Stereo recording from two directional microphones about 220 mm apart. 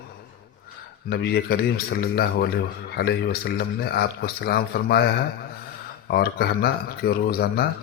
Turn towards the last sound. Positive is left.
turn(degrees=45)  # may be behind; listen again after turning